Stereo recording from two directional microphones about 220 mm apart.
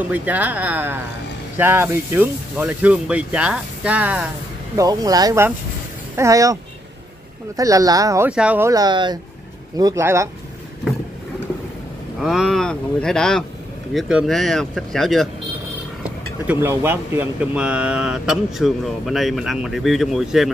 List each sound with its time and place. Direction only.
0.1 s speech: 5° right (ahead or behind)
4.7 s speech: 15° right (ahead or behind)
12.2 s speech: centre (ahead or behind)